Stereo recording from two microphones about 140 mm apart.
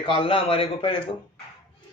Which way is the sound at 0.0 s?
40° left (ahead or behind).